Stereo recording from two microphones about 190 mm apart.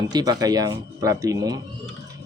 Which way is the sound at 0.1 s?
20° right (ahead or behind).